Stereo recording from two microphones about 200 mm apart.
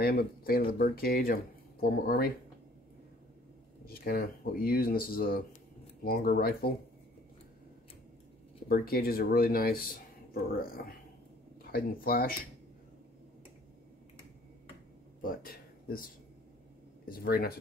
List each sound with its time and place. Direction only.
0.0 s speech: 45° left (ahead or behind)
3.8 s speech: 50° left (ahead or behind)
8.6 s speech: 50° left (ahead or behind)
15.2 s speech: 45° left (ahead or behind)
17.1 s speech: 50° left (ahead or behind)